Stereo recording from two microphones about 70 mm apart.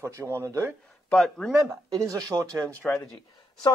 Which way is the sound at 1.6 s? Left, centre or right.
Right.